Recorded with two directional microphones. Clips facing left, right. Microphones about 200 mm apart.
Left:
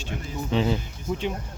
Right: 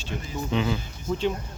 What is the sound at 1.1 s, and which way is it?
Speech, 10° left (ahead or behind).